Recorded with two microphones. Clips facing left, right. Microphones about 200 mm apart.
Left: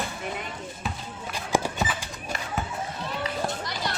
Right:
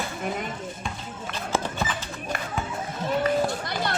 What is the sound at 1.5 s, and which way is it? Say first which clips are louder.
Run: left 2 dB; 10° left (ahead or behind).